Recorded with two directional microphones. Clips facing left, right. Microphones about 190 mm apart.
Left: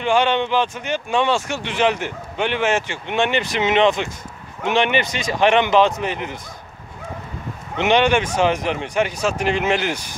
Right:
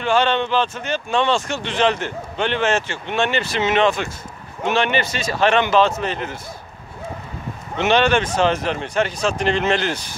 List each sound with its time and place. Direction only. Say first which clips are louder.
0.0 s speech: even; 15° left (ahead or behind)
7.7 s speech: even; 15° left (ahead or behind)